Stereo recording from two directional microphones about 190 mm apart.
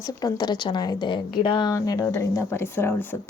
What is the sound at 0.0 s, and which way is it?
A woman's voice, 20° left (ahead or behind).